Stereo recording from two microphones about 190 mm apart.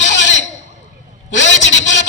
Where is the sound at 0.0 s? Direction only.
70° left (ahead or behind).